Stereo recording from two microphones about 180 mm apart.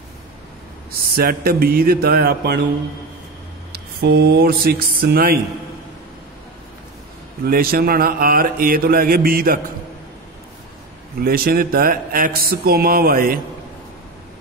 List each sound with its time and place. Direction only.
1.1 s speech: 55° right (ahead or behind)
3.7 s speech: 60° right (ahead or behind)
7.4 s speech: 55° right (ahead or behind)
11.1 s speech: 55° right (ahead or behind)